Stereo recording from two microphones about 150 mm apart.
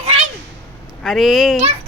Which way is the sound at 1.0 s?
Centre (ahead or behind).